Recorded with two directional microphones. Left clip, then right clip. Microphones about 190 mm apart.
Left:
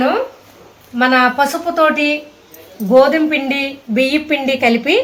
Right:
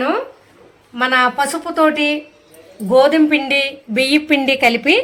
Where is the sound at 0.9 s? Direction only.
50° right (ahead or behind).